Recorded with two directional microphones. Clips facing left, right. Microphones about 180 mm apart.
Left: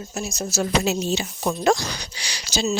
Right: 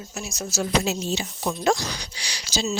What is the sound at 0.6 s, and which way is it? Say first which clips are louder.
Speech: left 2 dB; 65° left (ahead or behind).